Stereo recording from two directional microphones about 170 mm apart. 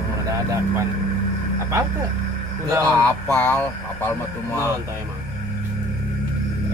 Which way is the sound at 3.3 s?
15° left (ahead or behind).